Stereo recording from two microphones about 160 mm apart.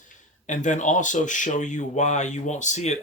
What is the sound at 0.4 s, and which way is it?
Speech, 50° left (ahead or behind).